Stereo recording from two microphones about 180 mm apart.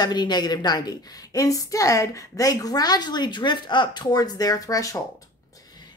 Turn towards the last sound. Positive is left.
turn(degrees=20)  # may be behind; listen again after turning